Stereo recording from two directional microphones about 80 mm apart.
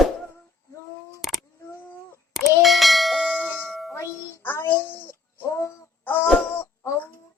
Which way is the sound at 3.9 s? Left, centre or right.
Left.